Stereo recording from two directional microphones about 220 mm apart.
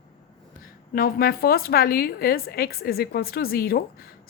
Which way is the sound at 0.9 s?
40° left (ahead or behind).